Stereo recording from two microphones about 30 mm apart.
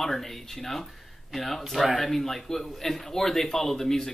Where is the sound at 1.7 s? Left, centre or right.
Centre.